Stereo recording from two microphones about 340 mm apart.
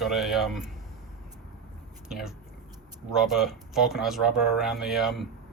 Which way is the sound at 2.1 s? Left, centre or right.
Centre.